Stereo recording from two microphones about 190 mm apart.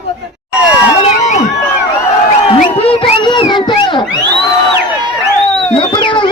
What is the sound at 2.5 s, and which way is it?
Crowd, 30° left (ahead or behind).